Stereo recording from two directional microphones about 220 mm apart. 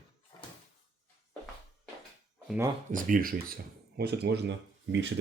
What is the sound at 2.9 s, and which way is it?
Speech, 35° right (ahead or behind).